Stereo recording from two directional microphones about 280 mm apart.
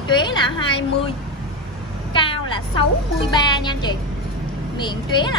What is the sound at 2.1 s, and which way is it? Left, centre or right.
A woman's voice, centre.